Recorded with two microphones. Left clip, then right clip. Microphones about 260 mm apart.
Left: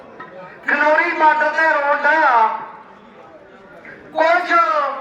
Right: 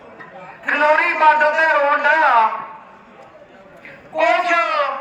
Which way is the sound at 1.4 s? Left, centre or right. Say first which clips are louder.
Right 1 dB; left.